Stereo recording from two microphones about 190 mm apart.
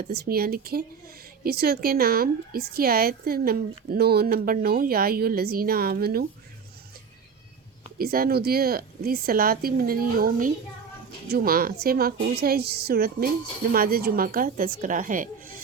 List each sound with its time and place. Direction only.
0.1 s a woman's voice: 55° right (ahead or behind)
7.9 s a woman's voice: 50° right (ahead or behind)